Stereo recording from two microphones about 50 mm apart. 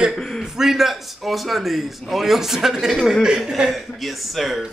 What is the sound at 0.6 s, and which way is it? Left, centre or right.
Speech, centre.